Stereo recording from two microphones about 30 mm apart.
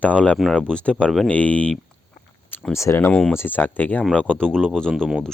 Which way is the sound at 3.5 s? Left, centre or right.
Left.